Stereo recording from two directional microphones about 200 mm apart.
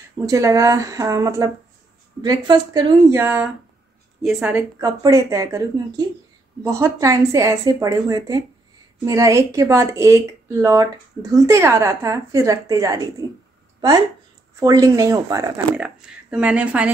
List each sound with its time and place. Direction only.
0.3 s a woman's voice: 15° right (ahead or behind)